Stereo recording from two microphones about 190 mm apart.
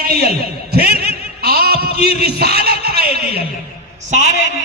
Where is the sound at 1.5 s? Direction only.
55° right (ahead or behind).